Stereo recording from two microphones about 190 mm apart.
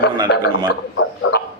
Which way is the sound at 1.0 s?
90° left.